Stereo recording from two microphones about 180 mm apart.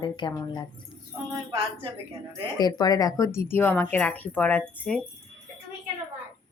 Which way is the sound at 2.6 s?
20° left (ahead or behind).